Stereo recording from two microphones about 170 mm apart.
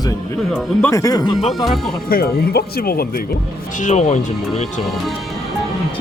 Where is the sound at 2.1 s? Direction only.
65° left (ahead or behind).